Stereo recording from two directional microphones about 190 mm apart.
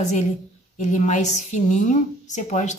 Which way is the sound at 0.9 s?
40° left (ahead or behind).